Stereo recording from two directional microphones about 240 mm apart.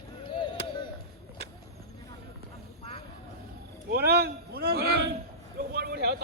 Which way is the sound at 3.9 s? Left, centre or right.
Right.